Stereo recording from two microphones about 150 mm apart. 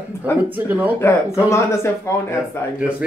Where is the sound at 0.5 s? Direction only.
10° right (ahead or behind).